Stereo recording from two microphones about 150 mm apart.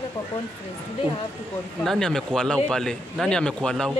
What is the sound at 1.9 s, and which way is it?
Speech, 5° left (ahead or behind).